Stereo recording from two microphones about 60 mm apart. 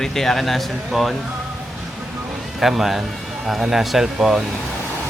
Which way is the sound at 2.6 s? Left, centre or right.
Centre.